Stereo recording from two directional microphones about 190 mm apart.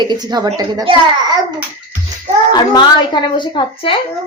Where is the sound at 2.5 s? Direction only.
20° left (ahead or behind).